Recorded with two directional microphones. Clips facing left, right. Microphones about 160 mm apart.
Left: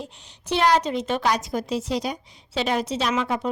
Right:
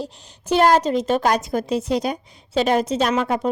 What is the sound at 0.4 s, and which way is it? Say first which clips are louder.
A woman's voice: right 4 dB; 45° right (ahead or behind).